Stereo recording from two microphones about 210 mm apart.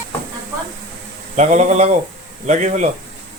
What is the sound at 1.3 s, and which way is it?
Speech, 35° right (ahead or behind).